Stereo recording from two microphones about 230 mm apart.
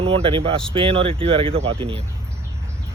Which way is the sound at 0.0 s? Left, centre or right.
Right.